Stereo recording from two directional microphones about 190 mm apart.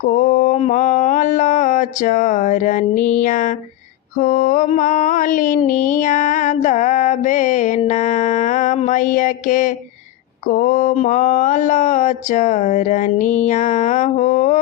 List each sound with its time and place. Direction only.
0.0 s mantra: 45° left (ahead or behind)